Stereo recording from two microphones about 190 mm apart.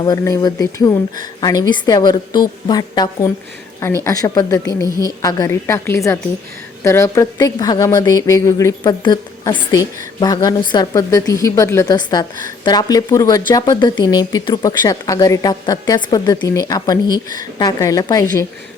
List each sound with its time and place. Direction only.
0.0 s speech: 20° left (ahead or behind)
4.9 s a woman's voice: 20° right (ahead or behind)
5.2 s a woman's voice: 15° left (ahead or behind)